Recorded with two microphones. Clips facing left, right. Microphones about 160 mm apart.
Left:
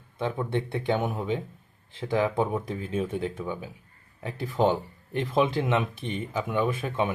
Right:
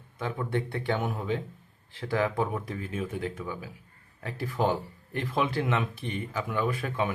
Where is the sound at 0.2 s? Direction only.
25° left (ahead or behind).